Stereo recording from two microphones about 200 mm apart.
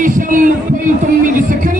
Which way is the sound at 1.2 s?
40° right (ahead or behind).